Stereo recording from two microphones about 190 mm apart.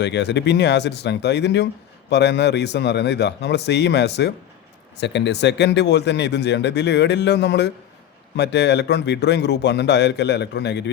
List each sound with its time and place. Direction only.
0.0 s speech: 65° left (ahead or behind)